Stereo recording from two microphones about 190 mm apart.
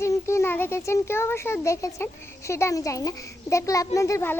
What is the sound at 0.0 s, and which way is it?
Speech, 15° left (ahead or behind).